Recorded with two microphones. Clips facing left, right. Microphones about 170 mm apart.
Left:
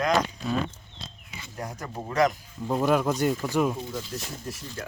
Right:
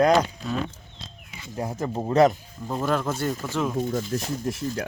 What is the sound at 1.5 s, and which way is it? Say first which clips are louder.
Speech: right 7 dB; 25° right (ahead or behind).